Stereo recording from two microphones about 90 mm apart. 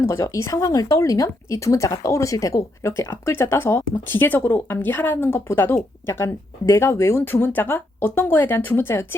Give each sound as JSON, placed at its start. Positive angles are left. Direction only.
{"t": 0.0, "sound": "speech", "side_deg": 30}